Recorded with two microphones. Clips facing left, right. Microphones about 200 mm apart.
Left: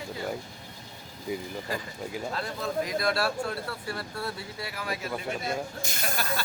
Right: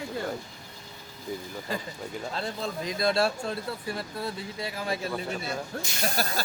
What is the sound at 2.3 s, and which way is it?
Speech, 25° right (ahead or behind).